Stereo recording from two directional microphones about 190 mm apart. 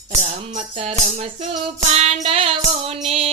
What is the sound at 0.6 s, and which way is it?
Music, 35° right (ahead or behind).